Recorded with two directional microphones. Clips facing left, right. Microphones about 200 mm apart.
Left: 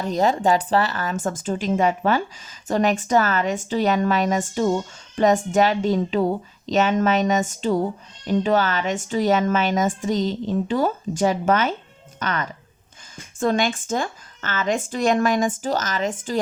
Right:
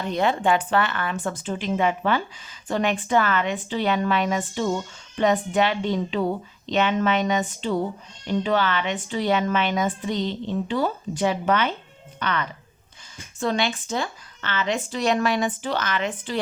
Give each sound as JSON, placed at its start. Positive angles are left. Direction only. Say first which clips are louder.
{"t": 0.0, "sound": "a woman's voice", "louder": "left 3 dB", "side_deg": 40}